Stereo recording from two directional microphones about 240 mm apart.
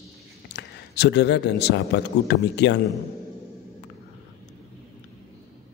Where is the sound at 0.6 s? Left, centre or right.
Left.